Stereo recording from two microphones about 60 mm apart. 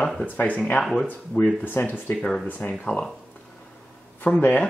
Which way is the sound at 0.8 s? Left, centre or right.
Centre.